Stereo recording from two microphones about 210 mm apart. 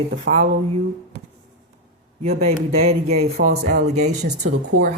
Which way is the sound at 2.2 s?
30° right (ahead or behind).